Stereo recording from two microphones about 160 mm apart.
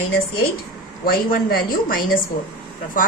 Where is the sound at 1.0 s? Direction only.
65° left (ahead or behind).